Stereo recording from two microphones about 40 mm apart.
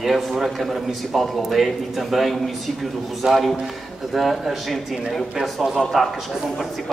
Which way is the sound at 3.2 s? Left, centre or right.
Right.